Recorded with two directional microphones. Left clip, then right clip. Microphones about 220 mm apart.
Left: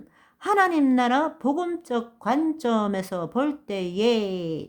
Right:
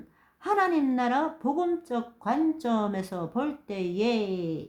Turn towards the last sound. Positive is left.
turn(degrees=35)  # may be behind; listen again after turning